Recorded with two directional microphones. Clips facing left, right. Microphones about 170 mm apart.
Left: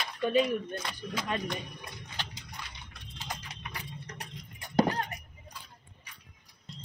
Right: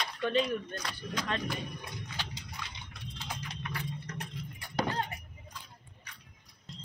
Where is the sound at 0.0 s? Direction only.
5° left (ahead or behind).